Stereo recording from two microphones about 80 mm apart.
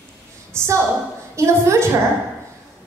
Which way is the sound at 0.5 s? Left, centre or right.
Right.